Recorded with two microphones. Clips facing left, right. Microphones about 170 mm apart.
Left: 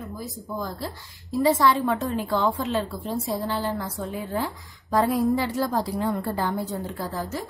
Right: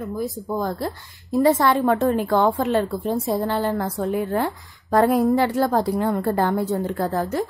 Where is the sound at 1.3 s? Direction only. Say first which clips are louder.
Right 3 dB; 55° right (ahead or behind).